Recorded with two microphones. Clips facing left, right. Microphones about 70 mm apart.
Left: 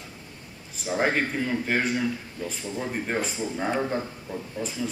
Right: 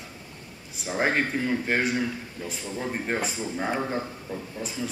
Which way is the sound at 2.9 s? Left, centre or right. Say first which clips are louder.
Even; centre.